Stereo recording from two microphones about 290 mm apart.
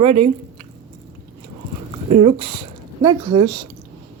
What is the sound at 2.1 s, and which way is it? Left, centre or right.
A woman's voice, right.